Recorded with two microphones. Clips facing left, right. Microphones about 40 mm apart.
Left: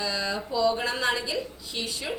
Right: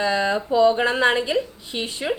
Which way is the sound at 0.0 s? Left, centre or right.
Right.